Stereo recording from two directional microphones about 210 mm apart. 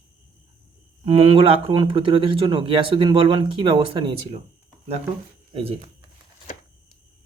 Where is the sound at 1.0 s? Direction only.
25° right (ahead or behind).